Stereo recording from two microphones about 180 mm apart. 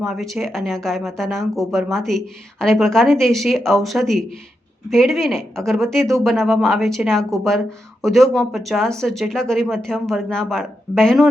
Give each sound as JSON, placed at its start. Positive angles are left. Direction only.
{"t": 0.0, "sound": "speech", "side_deg": 0}